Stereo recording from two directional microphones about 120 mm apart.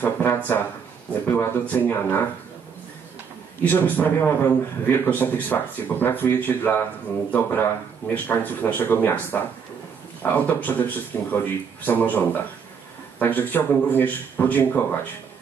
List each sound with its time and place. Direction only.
0.0 s a man's voice: 15° left (ahead or behind)
3.6 s a man's voice: 15° left (ahead or behind)